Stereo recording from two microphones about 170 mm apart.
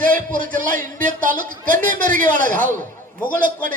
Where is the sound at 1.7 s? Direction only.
50° right (ahead or behind).